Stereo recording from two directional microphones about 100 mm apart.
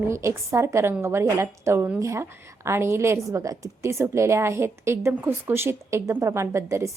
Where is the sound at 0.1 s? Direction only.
30° right (ahead or behind).